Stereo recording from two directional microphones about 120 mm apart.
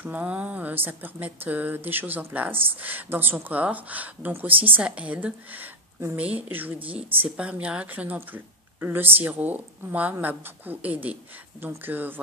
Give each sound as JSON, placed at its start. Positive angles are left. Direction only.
{"t": 0.0, "sound": "speech", "side_deg": -15}